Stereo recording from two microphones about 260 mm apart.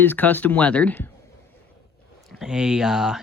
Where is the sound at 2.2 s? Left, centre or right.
Centre.